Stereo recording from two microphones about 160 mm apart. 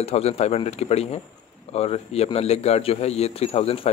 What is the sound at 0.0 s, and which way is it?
A man's voice, 40° left (ahead or behind).